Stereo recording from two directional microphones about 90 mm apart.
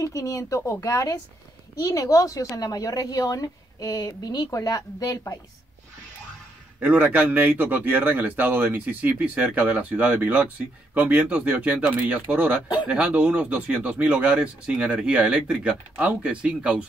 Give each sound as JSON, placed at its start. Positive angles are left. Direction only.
{"t": 0.0, "sound": "speech", "side_deg": 35}
{"t": 6.8, "sound": "speech", "side_deg": -15}